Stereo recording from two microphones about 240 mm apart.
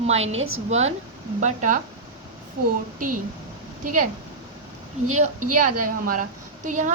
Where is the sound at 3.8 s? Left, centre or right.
Right.